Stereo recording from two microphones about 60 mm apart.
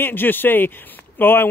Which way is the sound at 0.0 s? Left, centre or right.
Left.